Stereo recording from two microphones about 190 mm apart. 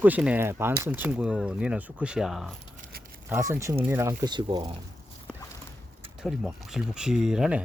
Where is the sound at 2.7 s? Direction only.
45° right (ahead or behind).